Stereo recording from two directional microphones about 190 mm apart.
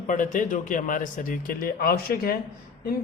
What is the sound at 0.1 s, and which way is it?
A man's voice, 45° left (ahead or behind).